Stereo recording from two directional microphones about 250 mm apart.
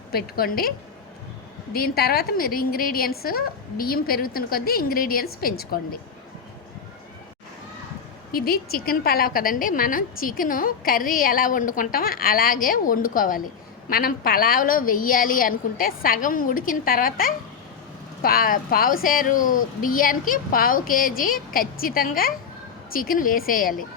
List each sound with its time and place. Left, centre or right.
0.1 s a woman's voice: left
1.7 s a woman's voice: left
8.3 s a woman's voice: left